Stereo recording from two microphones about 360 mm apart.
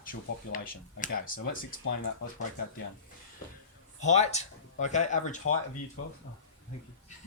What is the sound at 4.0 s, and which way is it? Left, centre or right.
Speech, centre.